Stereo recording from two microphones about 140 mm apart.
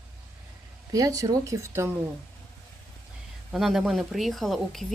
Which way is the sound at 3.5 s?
Centre (ahead or behind).